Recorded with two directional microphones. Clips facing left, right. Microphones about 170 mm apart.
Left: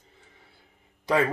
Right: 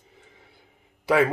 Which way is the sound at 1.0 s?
10° right (ahead or behind).